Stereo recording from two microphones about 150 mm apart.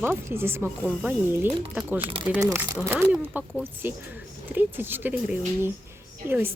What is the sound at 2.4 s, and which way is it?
A woman's voice, 20° right (ahead or behind).